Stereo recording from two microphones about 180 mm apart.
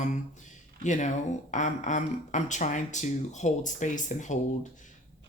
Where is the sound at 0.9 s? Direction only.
45° left (ahead or behind).